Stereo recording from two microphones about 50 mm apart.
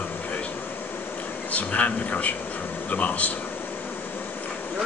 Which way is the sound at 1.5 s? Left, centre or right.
Left.